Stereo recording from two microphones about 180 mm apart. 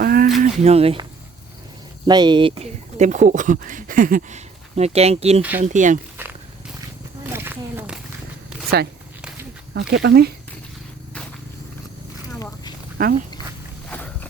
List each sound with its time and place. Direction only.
0.0 s a sound: 55° right (ahead or behind)
0.6 s speech: 35° right (ahead or behind)
2.0 s speech: 25° right (ahead or behind)
5.4 s speech: 10° right (ahead or behind)
5.6 s speech: 45° right (ahead or behind)
7.3 s a sound: 10° right (ahead or behind)
9.7 s speech: 75° right (ahead or behind)
13.0 s speech: 50° right (ahead or behind)
13.9 s walk: 10° left (ahead or behind)